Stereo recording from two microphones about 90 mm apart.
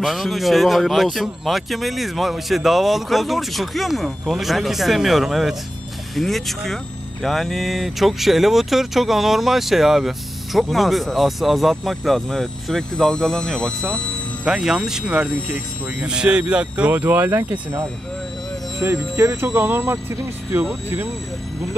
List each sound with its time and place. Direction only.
0.0 s speech: centre (ahead or behind)
14.4 s speech: 5° right (ahead or behind); by 20.6 s 30° right (ahead or behind)